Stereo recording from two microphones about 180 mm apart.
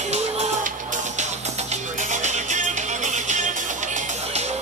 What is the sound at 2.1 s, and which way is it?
Music, 40° right (ahead or behind).